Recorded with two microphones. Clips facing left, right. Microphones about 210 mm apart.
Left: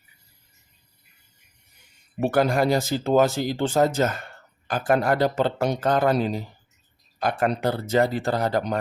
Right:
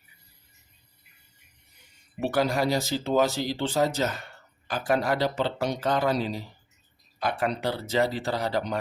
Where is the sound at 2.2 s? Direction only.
50° left (ahead or behind).